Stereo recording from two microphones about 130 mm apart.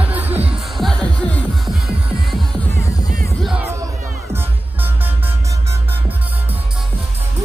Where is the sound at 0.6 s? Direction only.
Centre (ahead or behind).